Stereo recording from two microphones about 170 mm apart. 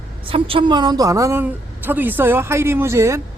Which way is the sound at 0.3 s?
30° right (ahead or behind).